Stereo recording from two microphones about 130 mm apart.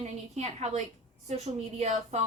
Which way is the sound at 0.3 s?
60° right (ahead or behind).